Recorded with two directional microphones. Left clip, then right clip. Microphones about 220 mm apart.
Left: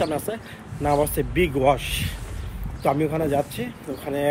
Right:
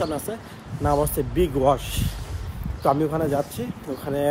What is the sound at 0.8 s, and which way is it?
Speech, 15° right (ahead or behind).